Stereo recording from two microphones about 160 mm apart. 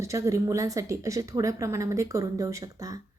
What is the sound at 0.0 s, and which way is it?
A woman's voice, 20° right (ahead or behind).